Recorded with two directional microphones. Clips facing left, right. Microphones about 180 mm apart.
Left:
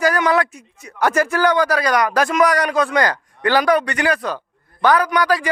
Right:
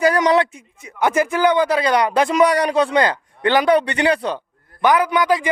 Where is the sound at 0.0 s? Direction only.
30° right (ahead or behind).